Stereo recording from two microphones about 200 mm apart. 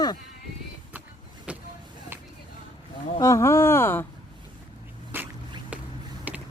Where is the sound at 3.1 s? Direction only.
15° left (ahead or behind).